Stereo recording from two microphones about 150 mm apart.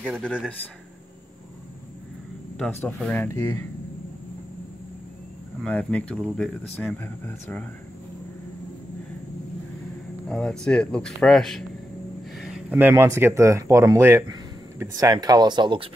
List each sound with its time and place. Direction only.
3.0 s speech: 10° left (ahead or behind)
5.6 s speech: 10° left (ahead or behind)
10.2 s speech: 5° left (ahead or behind); by 15.9 s 30° right (ahead or behind)